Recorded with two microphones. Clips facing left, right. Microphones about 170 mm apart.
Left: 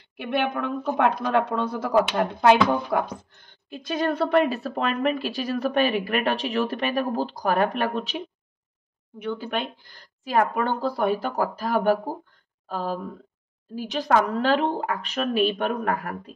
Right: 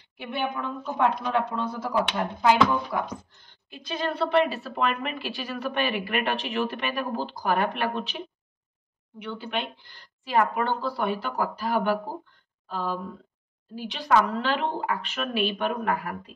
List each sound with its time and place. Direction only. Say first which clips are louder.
0.2 s speech: left 5 dB; 65° left (ahead or behind)
3.7 s a woman's voice: left 5 dB; 45° left (ahead or behind)
9.2 s speech: left 4 dB; 45° left (ahead or behind)